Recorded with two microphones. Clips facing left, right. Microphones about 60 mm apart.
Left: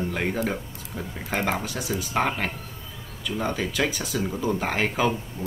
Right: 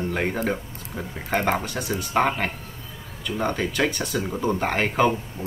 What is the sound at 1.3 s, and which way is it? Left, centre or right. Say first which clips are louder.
Speech: right 3 dB; centre.